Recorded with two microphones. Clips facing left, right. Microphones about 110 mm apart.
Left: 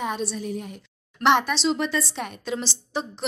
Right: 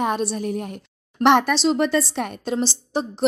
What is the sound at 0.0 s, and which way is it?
A woman's voice, 55° right (ahead or behind).